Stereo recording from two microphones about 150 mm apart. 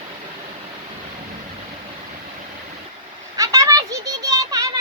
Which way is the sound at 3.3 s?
20° right (ahead or behind).